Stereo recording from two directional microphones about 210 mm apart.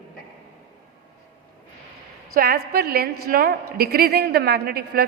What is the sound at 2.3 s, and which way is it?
A woman's voice, 45° right (ahead or behind).